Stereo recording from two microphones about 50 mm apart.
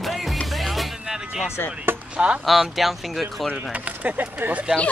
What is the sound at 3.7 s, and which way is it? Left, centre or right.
Speech, right.